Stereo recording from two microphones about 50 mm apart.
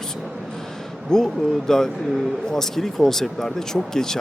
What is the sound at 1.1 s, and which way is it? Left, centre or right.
Speech, centre.